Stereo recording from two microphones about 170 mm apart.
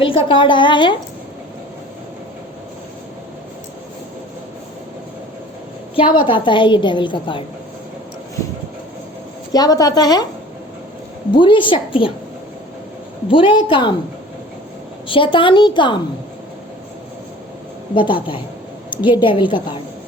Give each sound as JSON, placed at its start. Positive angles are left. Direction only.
{"t": 0.0, "sound": "a woman's voice", "side_deg": 30}
{"t": 6.0, "sound": "a woman's voice", "side_deg": 30}
{"t": 9.5, "sound": "a woman's voice", "side_deg": 20}
{"t": 11.3, "sound": "a woman's voice", "side_deg": 30}
{"t": 13.3, "sound": "a woman's voice", "side_deg": 30}
{"t": 15.0, "sound": "a woman's voice", "side_deg": 30}
{"t": 17.9, "sound": "a woman's voice", "side_deg": 30}